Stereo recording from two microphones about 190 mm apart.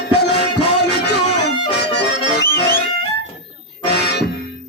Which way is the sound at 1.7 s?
60° left (ahead or behind).